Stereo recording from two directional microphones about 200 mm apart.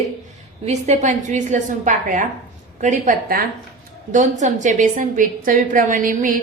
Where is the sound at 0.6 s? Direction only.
35° right (ahead or behind).